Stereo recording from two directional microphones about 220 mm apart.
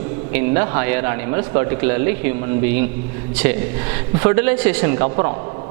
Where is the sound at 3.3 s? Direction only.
10° right (ahead or behind).